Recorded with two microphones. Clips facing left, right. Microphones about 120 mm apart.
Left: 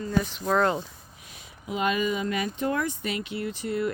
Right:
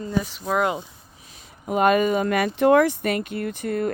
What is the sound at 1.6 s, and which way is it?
Speech, 55° right (ahead or behind).